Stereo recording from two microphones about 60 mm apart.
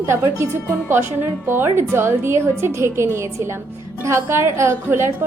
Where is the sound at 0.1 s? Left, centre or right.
Right.